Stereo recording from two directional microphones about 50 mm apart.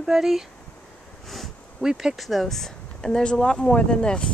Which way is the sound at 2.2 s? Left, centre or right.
Centre.